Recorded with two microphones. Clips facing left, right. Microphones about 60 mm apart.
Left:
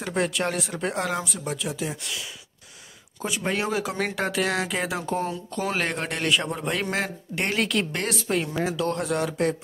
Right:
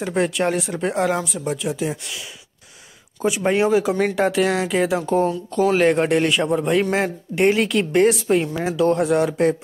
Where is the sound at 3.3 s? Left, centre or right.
Centre.